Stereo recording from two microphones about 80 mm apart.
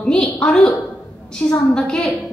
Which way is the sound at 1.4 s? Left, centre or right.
Centre.